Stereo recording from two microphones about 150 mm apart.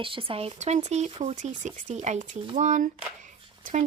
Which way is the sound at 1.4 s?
60° right (ahead or behind).